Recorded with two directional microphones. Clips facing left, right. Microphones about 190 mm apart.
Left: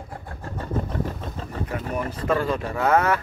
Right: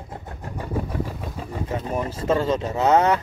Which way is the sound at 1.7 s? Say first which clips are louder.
Right 2 dB; 20° right (ahead or behind).